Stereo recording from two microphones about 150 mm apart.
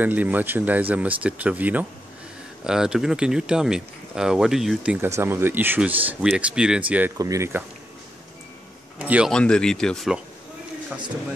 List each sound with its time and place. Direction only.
0.0 s speech: 10° right (ahead or behind)
5.0 s speech: 15° right (ahead or behind)
7.2 s speech: 20° right (ahead or behind)
8.9 s a man's voice: 10° right (ahead or behind)
9.3 s speech: 5° left (ahead or behind)